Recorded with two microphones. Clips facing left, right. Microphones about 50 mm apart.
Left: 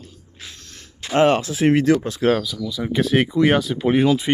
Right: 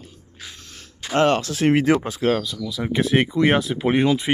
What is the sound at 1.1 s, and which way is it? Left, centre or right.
Speech, centre.